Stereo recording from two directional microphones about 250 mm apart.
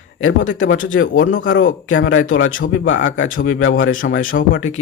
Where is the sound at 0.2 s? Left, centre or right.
Left.